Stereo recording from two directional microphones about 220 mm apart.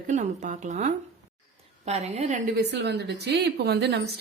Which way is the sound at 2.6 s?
50° right (ahead or behind).